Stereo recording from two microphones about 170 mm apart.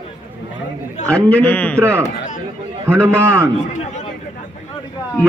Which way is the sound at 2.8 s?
15° right (ahead or behind).